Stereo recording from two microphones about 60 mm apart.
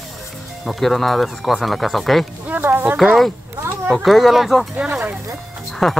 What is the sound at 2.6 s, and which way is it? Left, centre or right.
Speech, right.